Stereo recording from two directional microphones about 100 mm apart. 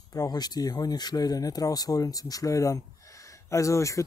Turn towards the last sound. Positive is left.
turn(degrees=30)  # may be behind; listen again after turning